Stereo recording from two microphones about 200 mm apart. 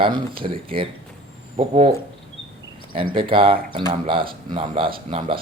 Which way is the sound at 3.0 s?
25° right (ahead or behind).